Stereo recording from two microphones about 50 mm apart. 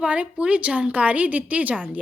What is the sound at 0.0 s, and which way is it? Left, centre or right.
A woman's voice, right.